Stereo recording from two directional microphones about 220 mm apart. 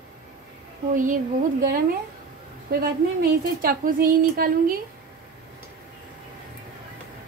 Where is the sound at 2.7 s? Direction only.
40° right (ahead or behind).